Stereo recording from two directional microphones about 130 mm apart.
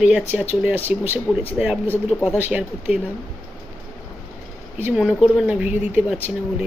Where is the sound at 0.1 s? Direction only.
10° right (ahead or behind).